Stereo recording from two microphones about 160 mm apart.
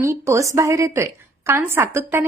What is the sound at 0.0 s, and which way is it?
A woman's voice, 20° right (ahead or behind).